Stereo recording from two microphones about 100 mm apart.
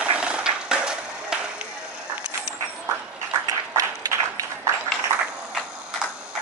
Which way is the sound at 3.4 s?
35° right (ahead or behind).